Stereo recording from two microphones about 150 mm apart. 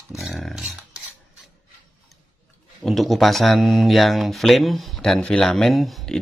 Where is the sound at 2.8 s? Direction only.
Centre (ahead or behind).